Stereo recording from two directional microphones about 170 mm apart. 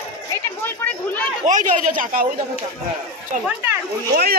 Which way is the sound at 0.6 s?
10° left (ahead or behind).